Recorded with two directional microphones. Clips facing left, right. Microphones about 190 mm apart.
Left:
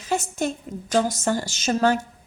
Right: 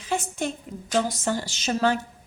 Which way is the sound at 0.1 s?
40° left (ahead or behind).